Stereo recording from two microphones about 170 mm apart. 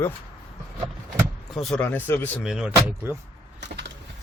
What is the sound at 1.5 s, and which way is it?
Speech, centre (ahead or behind).